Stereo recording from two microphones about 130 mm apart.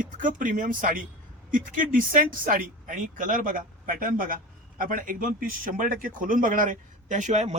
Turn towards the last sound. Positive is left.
turn(degrees=-60)  # may be behind; listen again after turning